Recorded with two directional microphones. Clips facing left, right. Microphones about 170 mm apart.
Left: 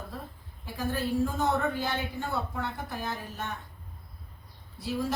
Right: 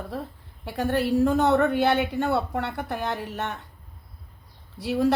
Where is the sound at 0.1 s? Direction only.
70° right (ahead or behind).